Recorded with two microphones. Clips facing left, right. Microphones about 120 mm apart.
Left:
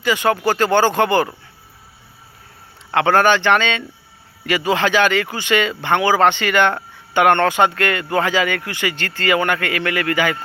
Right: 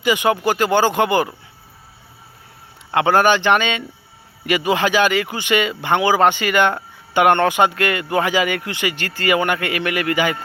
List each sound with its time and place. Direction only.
0.0 s speech: 15° right (ahead or behind)
2.9 s speech: 15° right (ahead or behind)